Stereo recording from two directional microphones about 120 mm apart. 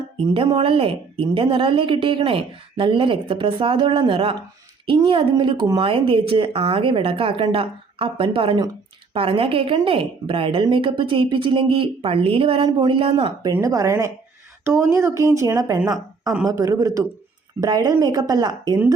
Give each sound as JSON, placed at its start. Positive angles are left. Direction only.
{"t": 0.3, "sound": "a woman's voice", "side_deg": -45}
{"t": 12.6, "sound": "a woman's voice", "side_deg": -35}
{"t": 13.0, "sound": "a woman's voice", "side_deg": -50}
{"t": 13.5, "sound": "a woman's voice", "side_deg": -25}